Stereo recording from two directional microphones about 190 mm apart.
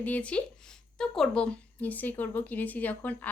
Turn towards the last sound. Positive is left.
turn(degrees=10)  # may be behind; listen again after turning